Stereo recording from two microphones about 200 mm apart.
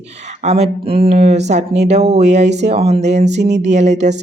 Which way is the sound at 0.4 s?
30° right (ahead or behind).